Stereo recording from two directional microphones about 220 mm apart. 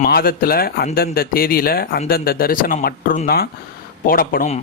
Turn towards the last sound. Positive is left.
turn(degrees=40)  # may be behind; listen again after turning